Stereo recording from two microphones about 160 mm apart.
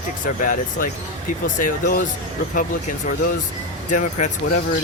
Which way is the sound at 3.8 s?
55° left (ahead or behind).